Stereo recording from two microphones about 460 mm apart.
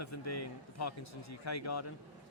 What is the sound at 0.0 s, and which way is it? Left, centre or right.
Speech, left.